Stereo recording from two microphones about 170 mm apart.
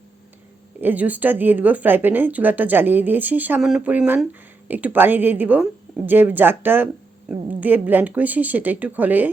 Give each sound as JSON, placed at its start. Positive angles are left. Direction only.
{"t": 0.8, "sound": "a woman's voice", "side_deg": -10}